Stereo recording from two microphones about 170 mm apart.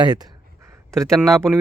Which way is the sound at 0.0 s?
25° right (ahead or behind).